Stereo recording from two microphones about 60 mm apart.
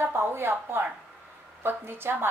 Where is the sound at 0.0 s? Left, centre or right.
Right.